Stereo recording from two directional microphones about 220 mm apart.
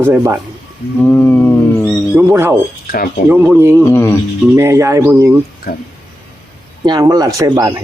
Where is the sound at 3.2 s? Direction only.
10° right (ahead or behind).